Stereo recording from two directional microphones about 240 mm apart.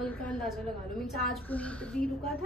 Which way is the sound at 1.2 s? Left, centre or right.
Centre.